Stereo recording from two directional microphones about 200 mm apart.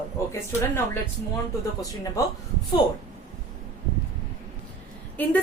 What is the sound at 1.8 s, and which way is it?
Speech, 15° left (ahead or behind).